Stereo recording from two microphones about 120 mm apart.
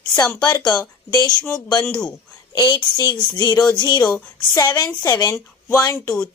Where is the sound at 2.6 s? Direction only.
35° left (ahead or behind).